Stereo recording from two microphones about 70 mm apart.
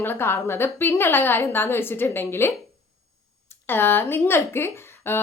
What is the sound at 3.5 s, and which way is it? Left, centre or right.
Speech, left.